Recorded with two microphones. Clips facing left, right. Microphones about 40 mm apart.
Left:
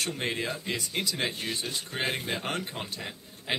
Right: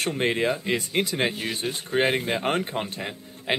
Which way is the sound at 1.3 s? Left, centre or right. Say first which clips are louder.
Right 4 dB; centre.